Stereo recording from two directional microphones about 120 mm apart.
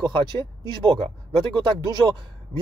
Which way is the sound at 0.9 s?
45° right (ahead or behind).